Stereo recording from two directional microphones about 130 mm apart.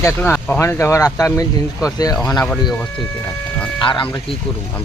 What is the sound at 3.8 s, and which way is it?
Speech, 40° left (ahead or behind).